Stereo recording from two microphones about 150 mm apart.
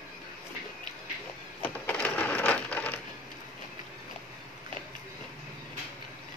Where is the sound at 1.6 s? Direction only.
10° left (ahead or behind).